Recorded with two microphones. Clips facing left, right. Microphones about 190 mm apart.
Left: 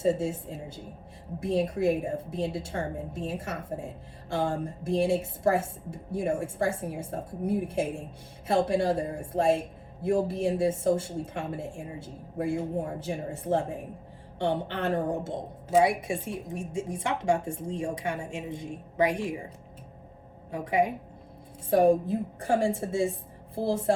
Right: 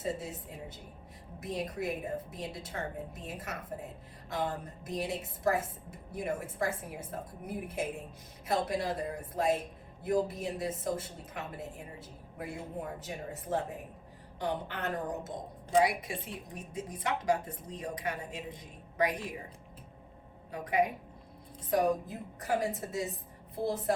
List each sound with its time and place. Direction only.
0.0 s a woman's voice: 30° left (ahead or behind)
20.5 s a woman's voice: 25° left (ahead or behind)